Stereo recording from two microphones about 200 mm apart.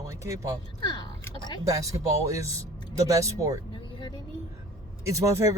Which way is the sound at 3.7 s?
20° left (ahead or behind).